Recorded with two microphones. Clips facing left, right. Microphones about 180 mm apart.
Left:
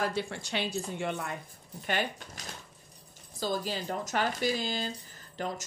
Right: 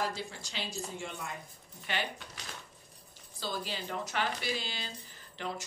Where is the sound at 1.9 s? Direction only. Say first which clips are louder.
Left 5 dB; 45° left (ahead or behind).